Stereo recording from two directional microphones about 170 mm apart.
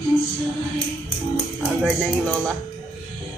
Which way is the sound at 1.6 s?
5° left (ahead or behind).